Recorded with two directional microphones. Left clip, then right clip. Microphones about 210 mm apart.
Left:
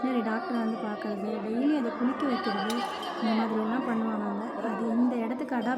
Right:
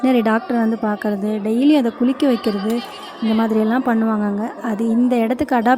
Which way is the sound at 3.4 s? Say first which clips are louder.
Right 11 dB; 45° right (ahead or behind).